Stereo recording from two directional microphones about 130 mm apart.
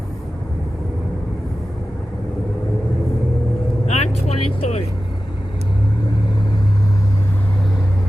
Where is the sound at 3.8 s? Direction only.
55° left (ahead or behind).